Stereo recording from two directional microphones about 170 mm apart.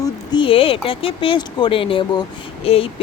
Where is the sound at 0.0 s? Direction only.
30° left (ahead or behind).